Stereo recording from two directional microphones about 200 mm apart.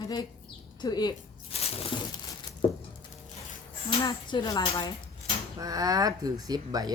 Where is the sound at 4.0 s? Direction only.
20° left (ahead or behind).